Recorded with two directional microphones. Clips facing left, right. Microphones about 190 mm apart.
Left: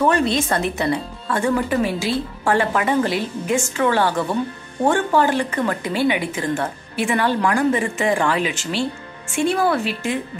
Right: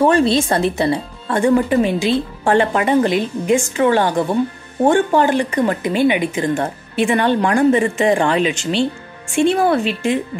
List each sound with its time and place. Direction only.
0.0 s speech: 30° right (ahead or behind)